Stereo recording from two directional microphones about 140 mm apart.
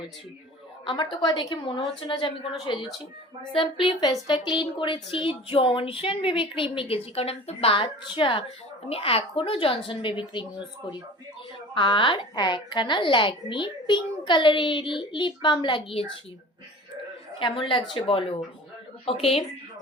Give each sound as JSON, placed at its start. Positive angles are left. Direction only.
{"t": 0.9, "sound": "a woman's voice", "side_deg": 35}
{"t": 11.7, "sound": "a woman's voice", "side_deg": 35}
{"t": 17.4, "sound": "a woman's voice", "side_deg": 40}